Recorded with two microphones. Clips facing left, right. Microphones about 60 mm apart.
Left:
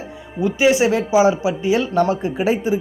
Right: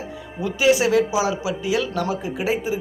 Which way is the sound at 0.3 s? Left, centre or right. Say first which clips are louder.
Left 3 dB; left.